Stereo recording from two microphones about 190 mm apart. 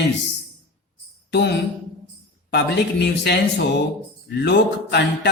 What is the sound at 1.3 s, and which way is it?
Speech, 65° left (ahead or behind).